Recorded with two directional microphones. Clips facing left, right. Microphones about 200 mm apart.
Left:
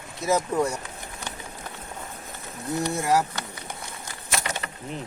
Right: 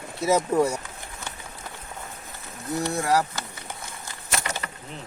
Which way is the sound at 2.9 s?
15° left (ahead or behind).